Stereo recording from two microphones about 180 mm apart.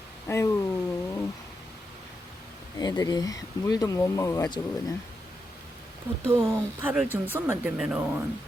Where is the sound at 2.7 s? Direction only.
20° left (ahead or behind).